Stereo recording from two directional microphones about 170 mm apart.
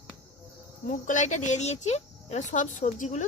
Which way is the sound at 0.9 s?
45° left (ahead or behind).